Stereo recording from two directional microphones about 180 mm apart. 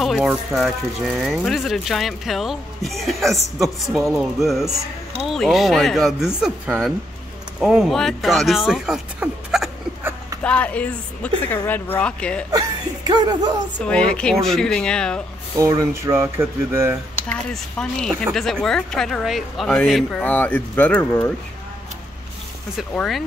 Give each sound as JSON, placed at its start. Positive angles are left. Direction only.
{"t": 0.0, "sound": "speech", "side_deg": 0}
{"t": 12.4, "sound": "speech", "side_deg": -20}
{"t": 13.7, "sound": "speech", "side_deg": 5}
{"t": 15.5, "sound": "speech", "side_deg": -20}
{"t": 17.3, "sound": "speech", "side_deg": 5}
{"t": 22.8, "sound": "speech", "side_deg": 0}